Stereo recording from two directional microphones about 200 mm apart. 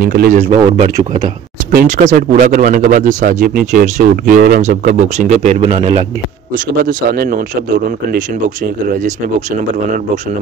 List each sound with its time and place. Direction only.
0.0 s a man's voice: 50° right (ahead or behind); by 6.0 s 30° right (ahead or behind)
6.8 s a man's voice: 45° right (ahead or behind)